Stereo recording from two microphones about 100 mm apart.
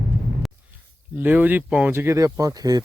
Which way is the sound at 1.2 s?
20° right (ahead or behind).